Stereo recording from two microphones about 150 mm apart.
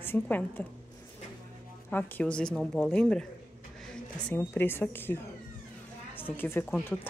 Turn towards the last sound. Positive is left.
turn(degrees=15)  # may be behind; listen again after turning